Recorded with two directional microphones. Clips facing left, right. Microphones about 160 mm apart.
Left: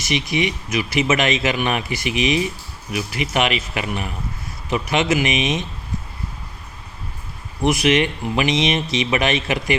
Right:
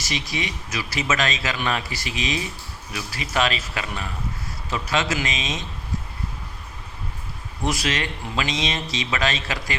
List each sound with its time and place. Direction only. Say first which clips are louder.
0.0 s speech: left 7 dB; 20° left (ahead or behind)
7.6 s speech: left 8 dB; 20° left (ahead or behind)